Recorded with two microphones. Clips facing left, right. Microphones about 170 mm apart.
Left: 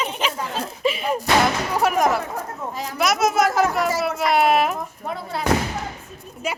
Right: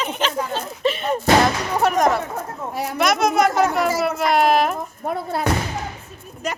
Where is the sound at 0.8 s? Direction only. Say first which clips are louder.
Right 1 dB; 5° left (ahead or behind).